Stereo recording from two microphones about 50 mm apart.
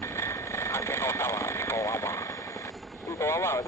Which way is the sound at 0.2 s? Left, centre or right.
Left.